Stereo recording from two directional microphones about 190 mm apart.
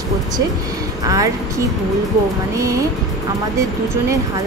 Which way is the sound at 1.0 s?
15° right (ahead or behind).